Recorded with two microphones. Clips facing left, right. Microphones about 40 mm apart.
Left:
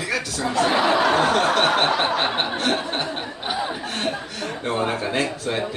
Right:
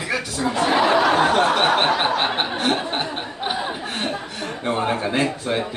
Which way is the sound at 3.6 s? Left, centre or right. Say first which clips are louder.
Even; centre.